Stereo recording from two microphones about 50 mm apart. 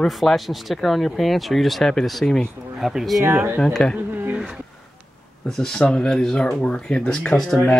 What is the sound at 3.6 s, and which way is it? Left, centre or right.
Speech, centre.